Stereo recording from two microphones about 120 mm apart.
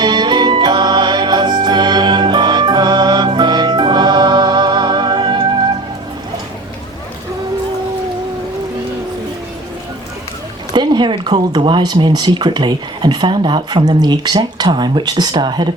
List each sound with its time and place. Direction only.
0.0 s music: 35° right (ahead or behind)
10.7 s speech: 35° right (ahead or behind)